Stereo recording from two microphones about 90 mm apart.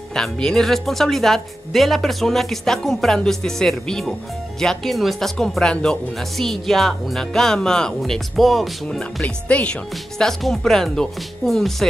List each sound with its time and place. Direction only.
0.1 s speech: 5° left (ahead or behind)
9.2 s speech: 15° left (ahead or behind)
10.1 s speech: 5° left (ahead or behind)